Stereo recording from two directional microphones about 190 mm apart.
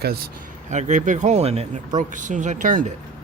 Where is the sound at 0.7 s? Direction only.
40° right (ahead or behind).